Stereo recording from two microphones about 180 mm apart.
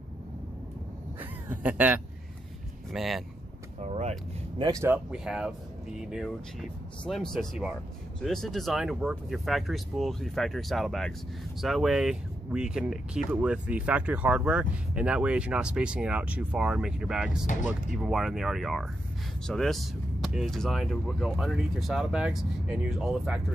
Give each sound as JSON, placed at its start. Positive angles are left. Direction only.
{"t": 1.2, "sound": "speech", "side_deg": -10}
{"t": 3.8, "sound": "vehicle", "side_deg": -40}
{"t": 4.6, "sound": "speech", "side_deg": -25}
{"t": 4.8, "sound": "speech", "side_deg": -5}